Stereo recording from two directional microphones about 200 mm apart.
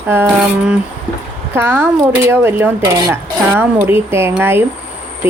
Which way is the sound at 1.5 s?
10° right (ahead or behind).